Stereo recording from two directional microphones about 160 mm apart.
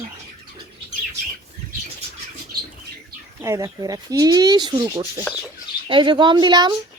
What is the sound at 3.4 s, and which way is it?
Speech, 20° right (ahead or behind).